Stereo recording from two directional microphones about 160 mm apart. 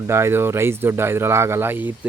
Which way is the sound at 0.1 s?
15° right (ahead or behind).